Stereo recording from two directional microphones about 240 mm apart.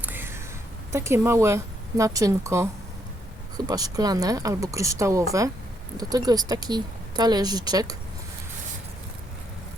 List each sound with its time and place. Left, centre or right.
0.0 s a sound: centre
0.9 s a woman's voice: centre
3.7 s a woman's voice: centre